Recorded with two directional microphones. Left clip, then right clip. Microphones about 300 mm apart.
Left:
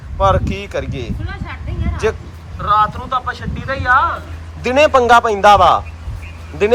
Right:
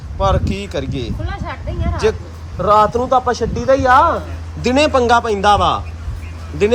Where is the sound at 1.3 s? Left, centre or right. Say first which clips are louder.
Right 3 dB; right.